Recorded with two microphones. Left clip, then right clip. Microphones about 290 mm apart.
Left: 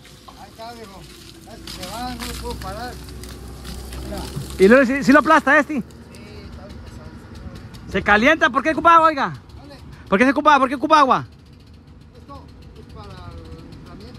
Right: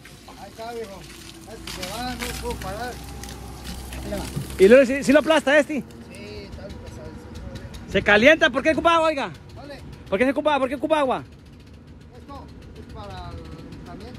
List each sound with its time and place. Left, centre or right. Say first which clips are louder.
2.0 s speech: even; centre
2.4 s speech: left 1 dB; left
4.6 s speech: even; left
7.9 s speech: even; centre